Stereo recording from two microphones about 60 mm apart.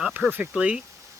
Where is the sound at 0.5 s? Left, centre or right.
Right.